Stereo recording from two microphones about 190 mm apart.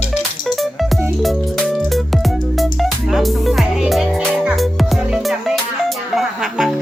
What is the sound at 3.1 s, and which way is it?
Music, centre (ahead or behind).